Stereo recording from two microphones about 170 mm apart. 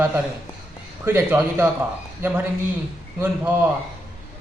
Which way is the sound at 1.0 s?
10° right (ahead or behind).